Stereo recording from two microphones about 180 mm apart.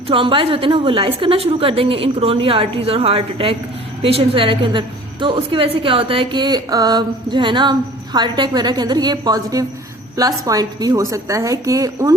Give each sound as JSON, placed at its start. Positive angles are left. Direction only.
{"t": 0.1, "sound": "a woman's voice", "side_deg": -30}